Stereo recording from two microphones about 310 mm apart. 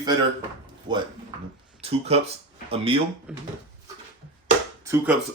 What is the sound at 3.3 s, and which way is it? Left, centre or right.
Speech, centre.